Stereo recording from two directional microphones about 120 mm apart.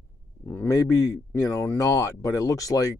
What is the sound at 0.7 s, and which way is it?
Speech, 25° left (ahead or behind).